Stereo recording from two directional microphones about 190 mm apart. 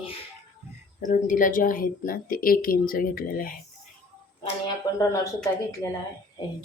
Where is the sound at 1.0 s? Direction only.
45° left (ahead or behind).